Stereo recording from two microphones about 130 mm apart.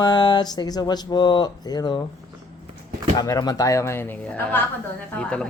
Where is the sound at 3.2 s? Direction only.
30° left (ahead or behind); by 4.6 s 15° left (ahead or behind).